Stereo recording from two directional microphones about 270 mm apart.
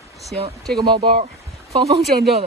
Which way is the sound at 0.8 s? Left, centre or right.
Centre.